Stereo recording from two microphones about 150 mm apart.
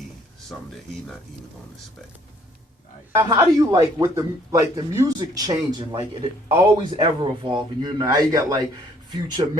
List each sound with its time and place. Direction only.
3.2 s speech: 25° right (ahead or behind)